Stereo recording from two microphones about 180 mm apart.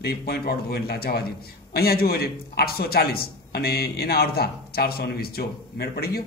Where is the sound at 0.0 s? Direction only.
60° left (ahead or behind).